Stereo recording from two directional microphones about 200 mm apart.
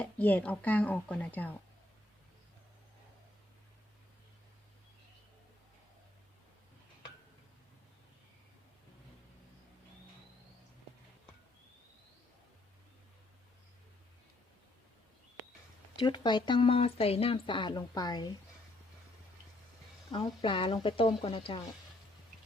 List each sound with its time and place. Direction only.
0.0 s speech: 10° left (ahead or behind)
16.0 s speech: 25° left (ahead or behind)
20.1 s speech: 25° left (ahead or behind)